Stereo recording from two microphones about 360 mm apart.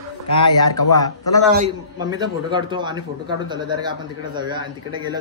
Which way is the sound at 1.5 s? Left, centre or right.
Centre.